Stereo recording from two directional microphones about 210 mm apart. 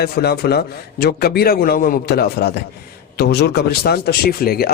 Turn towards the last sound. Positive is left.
turn(degrees=45)  # may be behind; listen again after turning